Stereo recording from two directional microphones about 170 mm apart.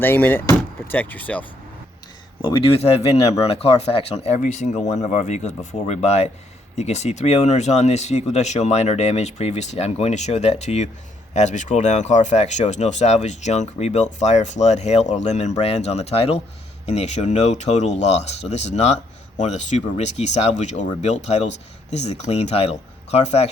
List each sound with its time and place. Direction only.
0.0 s speech: 10° left (ahead or behind)
2.4 s speech: 30° left (ahead or behind)